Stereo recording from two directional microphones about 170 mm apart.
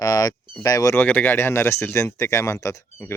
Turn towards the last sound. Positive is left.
turn(degrees=15)  # may be behind; listen again after turning